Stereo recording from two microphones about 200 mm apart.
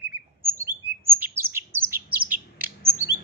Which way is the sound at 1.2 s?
10° right (ahead or behind).